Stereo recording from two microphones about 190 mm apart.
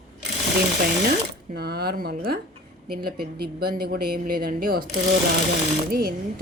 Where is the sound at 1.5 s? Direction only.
55° right (ahead or behind).